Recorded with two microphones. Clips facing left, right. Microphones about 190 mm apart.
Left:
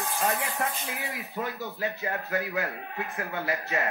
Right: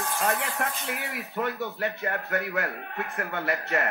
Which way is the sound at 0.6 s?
60° right (ahead or behind).